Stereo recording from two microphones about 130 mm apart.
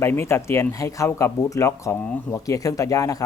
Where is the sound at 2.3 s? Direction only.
25° left (ahead or behind).